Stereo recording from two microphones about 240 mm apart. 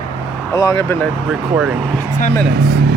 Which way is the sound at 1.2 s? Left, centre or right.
Centre.